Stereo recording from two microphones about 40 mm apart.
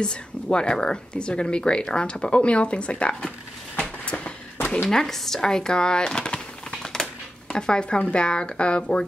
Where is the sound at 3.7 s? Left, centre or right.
Left.